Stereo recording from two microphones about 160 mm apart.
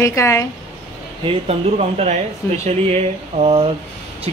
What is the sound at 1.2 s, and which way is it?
Speech, 40° right (ahead or behind).